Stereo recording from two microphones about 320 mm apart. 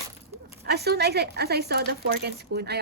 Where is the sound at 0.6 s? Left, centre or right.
Right.